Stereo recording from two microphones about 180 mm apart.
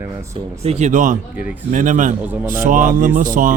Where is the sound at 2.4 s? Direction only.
50° right (ahead or behind).